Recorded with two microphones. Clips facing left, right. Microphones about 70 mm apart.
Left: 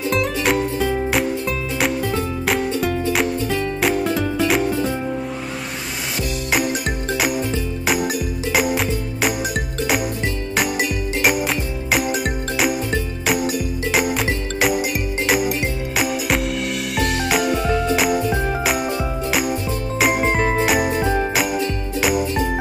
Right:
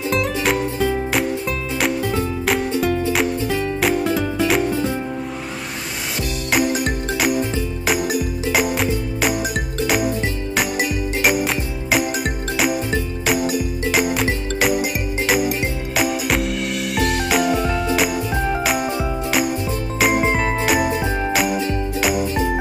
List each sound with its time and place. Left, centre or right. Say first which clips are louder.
0.1 s music: even; centre
6.5 s music: right 3 dB; centre
20.0 s jingle: right 1 dB; centre
20.3 s jingle bell: left 1 dB; centre
22.0 s music: left 2 dB; centre